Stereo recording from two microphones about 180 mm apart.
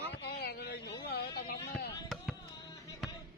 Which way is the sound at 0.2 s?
65° left (ahead or behind).